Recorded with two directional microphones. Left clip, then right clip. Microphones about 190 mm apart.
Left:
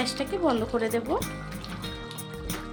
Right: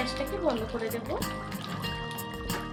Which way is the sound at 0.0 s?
50° left (ahead or behind).